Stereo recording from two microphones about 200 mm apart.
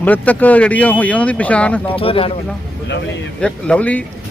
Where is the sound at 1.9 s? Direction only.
25° left (ahead or behind).